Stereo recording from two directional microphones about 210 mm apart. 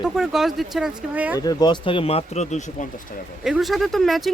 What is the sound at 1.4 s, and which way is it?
Speech, 20° left (ahead or behind).